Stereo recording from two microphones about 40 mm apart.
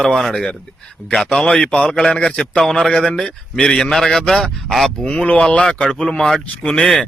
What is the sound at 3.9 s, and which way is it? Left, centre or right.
A man's voice, centre.